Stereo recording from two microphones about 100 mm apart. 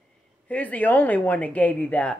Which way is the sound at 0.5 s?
15° left (ahead or behind).